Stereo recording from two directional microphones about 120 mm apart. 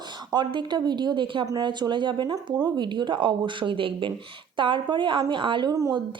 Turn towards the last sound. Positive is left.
turn(degrees=-30)  # may be behind; listen again after turning